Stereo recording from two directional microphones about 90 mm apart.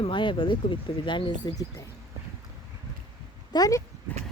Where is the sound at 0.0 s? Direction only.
65° left (ahead or behind).